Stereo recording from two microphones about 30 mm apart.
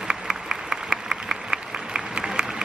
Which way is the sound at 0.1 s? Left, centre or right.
Right.